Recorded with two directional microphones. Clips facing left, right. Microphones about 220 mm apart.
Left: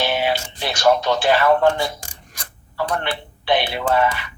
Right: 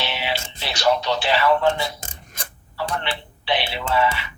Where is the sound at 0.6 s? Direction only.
50° left (ahead or behind).